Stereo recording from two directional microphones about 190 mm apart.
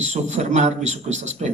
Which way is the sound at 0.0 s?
35° right (ahead or behind).